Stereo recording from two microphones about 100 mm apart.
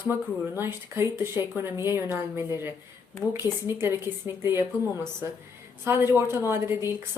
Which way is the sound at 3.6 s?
25° right (ahead or behind).